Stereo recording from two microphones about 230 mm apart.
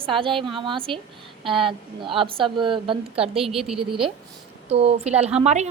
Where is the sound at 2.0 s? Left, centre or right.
Right.